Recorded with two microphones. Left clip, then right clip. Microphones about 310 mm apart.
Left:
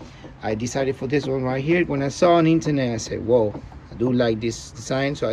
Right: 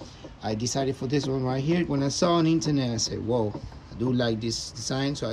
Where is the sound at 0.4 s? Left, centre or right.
Centre.